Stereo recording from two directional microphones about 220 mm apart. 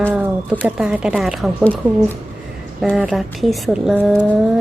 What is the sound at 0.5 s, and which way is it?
A woman's voice, centre (ahead or behind).